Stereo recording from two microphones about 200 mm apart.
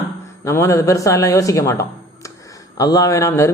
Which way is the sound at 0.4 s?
15° left (ahead or behind).